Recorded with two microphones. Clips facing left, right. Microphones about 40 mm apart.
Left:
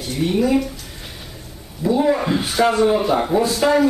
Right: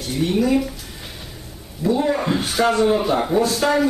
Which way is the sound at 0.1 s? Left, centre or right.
Centre.